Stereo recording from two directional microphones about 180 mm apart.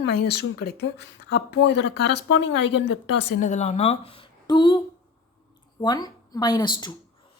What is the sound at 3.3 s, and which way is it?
Speech, 40° left (ahead or behind).